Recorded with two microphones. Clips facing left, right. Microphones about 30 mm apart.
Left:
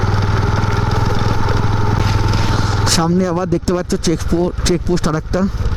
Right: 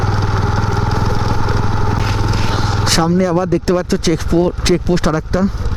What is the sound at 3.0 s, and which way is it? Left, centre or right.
Speech, centre.